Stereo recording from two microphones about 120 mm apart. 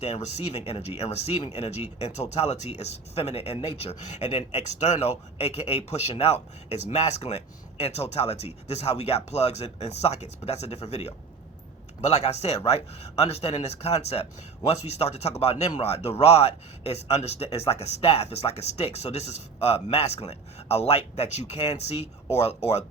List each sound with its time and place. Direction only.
0.0 s speech: 65° left (ahead or behind)